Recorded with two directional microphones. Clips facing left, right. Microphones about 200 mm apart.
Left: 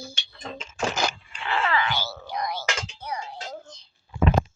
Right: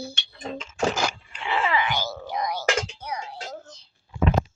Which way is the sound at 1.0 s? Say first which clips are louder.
Even; 10° right (ahead or behind).